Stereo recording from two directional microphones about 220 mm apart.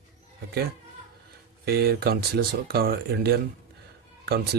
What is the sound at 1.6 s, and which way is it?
Speech, 45° right (ahead or behind).